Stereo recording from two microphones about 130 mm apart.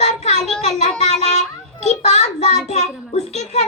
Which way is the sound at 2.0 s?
55° left (ahead or behind).